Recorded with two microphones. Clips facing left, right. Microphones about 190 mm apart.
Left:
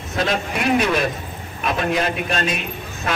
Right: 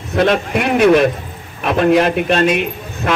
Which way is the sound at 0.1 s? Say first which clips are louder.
Right 8 dB; 60° right (ahead or behind).